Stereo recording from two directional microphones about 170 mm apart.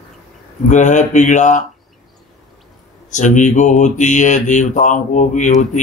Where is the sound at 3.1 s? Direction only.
45° left (ahead or behind).